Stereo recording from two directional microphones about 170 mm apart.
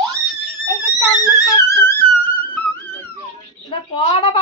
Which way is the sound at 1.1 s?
20° left (ahead or behind).